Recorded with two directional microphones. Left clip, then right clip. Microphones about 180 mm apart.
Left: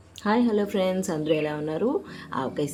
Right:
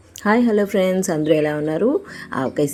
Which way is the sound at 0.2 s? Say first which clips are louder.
Right 7 dB; 30° right (ahead or behind).